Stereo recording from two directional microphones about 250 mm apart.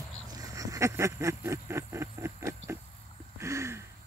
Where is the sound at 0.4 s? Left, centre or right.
Centre.